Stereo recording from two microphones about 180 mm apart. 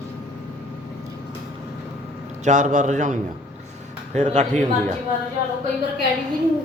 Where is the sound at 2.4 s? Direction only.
45° right (ahead or behind).